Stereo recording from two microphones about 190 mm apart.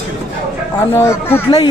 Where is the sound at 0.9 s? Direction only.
15° left (ahead or behind).